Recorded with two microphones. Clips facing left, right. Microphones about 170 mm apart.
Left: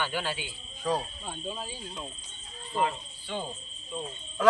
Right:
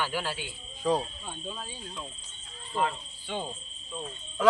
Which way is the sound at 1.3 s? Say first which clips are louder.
Left 2 dB; 10° left (ahead or behind).